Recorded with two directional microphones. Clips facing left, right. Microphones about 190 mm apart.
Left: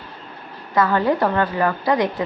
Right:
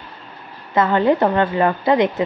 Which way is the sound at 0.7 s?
25° right (ahead or behind).